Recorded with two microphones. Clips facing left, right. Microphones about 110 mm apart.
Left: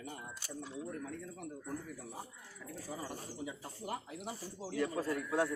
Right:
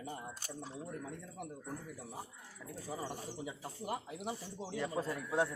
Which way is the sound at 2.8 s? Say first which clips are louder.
Right 2 dB; 20° right (ahead or behind).